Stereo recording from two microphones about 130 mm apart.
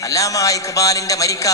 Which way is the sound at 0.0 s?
25° left (ahead or behind).